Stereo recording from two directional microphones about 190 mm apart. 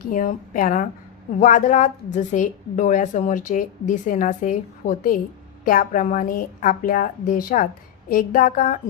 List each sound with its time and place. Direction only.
0.0 s a woman's voice: 45° left (ahead or behind)